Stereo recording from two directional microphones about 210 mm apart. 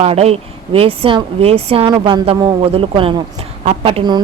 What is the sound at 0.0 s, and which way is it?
Speech, 30° right (ahead or behind).